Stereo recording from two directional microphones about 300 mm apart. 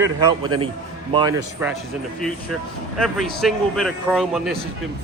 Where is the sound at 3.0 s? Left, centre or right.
Centre.